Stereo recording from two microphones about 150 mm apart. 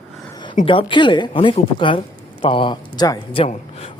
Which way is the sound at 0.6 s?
35° left (ahead or behind).